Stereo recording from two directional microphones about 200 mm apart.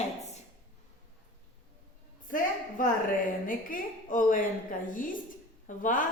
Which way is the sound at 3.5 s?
40° left (ahead or behind).